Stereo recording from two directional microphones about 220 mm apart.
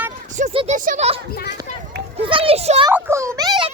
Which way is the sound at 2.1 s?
25° right (ahead or behind).